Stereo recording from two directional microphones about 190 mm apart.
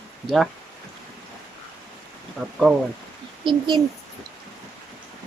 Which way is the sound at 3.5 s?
25° right (ahead or behind).